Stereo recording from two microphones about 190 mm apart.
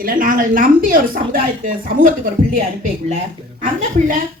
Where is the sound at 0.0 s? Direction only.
45° right (ahead or behind).